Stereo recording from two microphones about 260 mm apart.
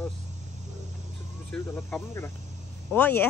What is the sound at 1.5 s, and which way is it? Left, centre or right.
Speech, centre.